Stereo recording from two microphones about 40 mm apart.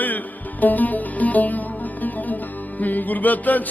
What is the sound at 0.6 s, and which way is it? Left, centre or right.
Music, left.